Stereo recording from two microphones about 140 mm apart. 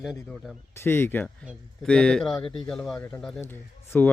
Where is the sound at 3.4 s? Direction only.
15° left (ahead or behind).